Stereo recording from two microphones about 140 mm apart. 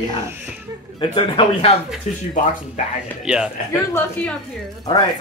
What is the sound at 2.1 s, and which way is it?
Speech, 60° left (ahead or behind).